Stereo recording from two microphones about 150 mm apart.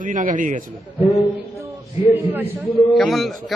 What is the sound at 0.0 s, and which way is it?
Speech, 65° right (ahead or behind).